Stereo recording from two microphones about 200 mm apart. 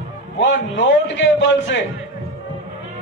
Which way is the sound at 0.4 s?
65° left (ahead or behind).